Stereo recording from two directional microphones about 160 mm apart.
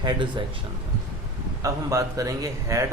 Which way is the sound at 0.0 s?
30° right (ahead or behind).